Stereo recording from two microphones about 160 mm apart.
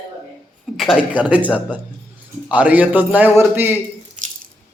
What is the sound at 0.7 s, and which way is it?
Speech, 5° right (ahead or behind).